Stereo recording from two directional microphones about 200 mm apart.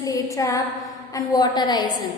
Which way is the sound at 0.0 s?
15° left (ahead or behind).